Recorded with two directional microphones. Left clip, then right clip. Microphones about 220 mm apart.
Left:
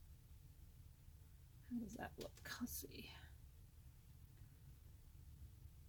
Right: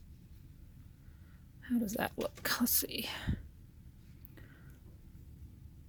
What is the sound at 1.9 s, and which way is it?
Speech, 40° right (ahead or behind).